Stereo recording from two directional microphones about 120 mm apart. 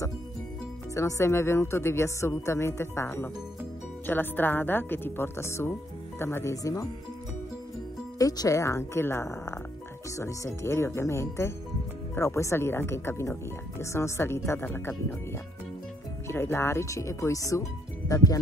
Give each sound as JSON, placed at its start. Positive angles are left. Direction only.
{"t": 0.9, "sound": "speech", "side_deg": 25}
{"t": 8.2, "sound": "speech", "side_deg": 30}
{"t": 16.3, "sound": "speech", "side_deg": 20}